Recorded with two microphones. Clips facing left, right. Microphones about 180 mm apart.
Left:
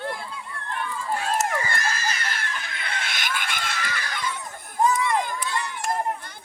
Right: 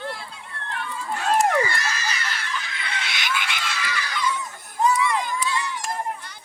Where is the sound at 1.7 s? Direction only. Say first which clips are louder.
Left 1 dB; 50° left (ahead or behind).